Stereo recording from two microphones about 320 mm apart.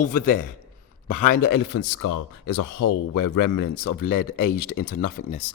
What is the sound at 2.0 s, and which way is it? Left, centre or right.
Speech, left.